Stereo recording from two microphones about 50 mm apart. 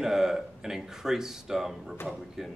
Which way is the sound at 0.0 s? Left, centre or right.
Centre.